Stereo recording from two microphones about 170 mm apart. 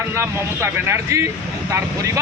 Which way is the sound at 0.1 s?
15° right (ahead or behind).